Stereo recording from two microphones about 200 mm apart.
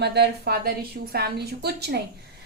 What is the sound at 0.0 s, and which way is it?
A woman's voice, 55° right (ahead or behind).